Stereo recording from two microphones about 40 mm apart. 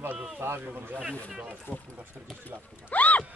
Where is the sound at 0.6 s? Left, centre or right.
Right.